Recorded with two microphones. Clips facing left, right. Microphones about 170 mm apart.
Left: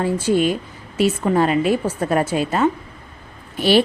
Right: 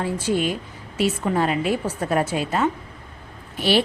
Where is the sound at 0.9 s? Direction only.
45° left (ahead or behind).